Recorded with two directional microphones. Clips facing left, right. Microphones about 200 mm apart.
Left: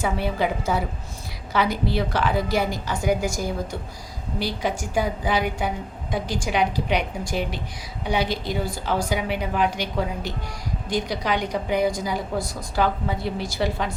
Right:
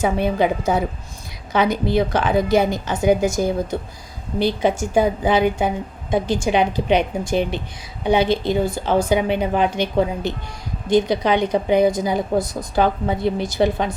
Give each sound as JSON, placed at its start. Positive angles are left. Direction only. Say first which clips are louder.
{"t": 0.0, "sound": "a woman's voice", "louder": "right 5 dB", "side_deg": -20}